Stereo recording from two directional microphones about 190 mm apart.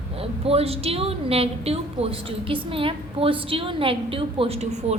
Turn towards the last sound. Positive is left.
turn(degrees=-35)  # may be behind; listen again after turning